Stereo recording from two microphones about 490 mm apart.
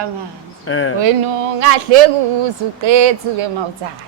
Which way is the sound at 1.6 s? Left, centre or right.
Right.